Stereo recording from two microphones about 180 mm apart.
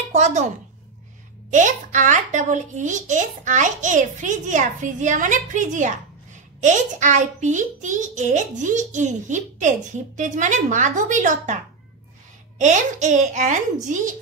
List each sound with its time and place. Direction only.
0.1 s speech: 40° right (ahead or behind)
1.5 s a child's voice: 45° right (ahead or behind)
12.5 s a child's voice: 40° right (ahead or behind)